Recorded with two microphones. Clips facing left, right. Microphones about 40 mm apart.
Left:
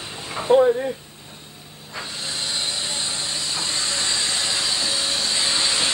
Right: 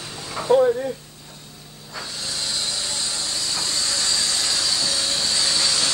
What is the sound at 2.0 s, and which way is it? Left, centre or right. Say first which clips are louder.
Hiss: left 1 dB; left.